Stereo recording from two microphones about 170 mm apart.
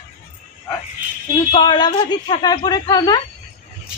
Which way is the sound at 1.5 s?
25° left (ahead or behind).